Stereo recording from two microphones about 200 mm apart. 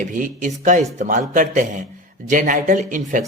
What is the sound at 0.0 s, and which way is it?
Speech, 40° right (ahead or behind).